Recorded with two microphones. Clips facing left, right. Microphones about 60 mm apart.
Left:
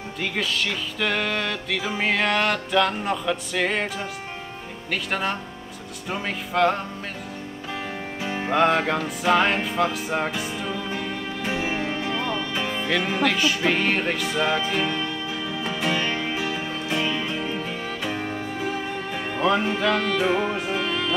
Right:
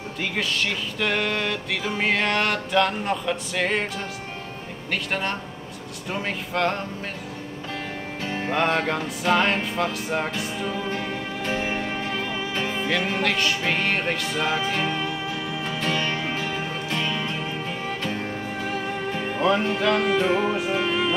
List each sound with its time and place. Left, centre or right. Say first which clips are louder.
0.2 s music: even; centre
4.9 s music: left 1 dB; centre
8.2 s music: left 1 dB; centre
8.5 s music: left 3 dB; centre
14.9 s music: even; centre
15.8 s music: left 1 dB; centre